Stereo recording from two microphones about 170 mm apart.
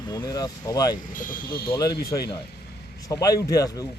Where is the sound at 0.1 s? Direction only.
20° left (ahead or behind).